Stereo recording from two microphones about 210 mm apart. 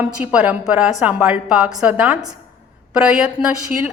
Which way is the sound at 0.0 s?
5° right (ahead or behind).